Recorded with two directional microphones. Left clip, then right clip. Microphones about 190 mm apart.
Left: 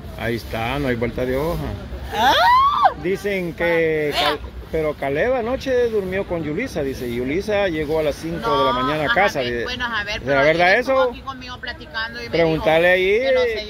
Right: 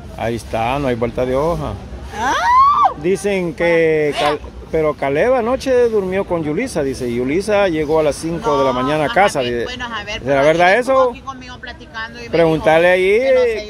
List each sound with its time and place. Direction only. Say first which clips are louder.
0.2 s speech: right 5 dB; 15° right (ahead or behind)
2.1 s a sound: right 1 dB; 40° left (ahead or behind)
3.0 s speech: right 5 dB; 30° right (ahead or behind)
4.1 s speech: right 3 dB; 10° left (ahead or behind)
4.7 s speech: right 5 dB; 25° right (ahead or behind)